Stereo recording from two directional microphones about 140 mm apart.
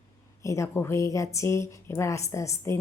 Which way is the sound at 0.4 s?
20° left (ahead or behind).